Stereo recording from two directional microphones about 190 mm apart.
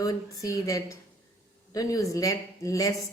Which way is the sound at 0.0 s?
15° left (ahead or behind).